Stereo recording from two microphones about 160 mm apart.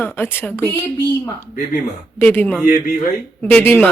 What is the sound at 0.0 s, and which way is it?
Speech, 15° left (ahead or behind).